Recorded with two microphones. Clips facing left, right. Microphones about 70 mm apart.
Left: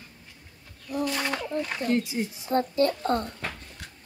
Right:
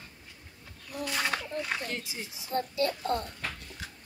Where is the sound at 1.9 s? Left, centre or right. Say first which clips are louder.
Left 12 dB; left.